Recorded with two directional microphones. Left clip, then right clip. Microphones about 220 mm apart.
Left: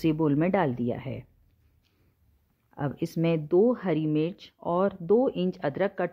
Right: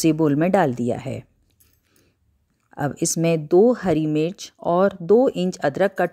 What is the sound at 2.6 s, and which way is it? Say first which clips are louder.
Speech: right 8 dB; 25° right (ahead or behind).